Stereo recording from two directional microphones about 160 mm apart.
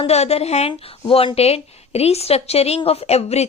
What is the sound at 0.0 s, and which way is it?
Speech, 40° left (ahead or behind).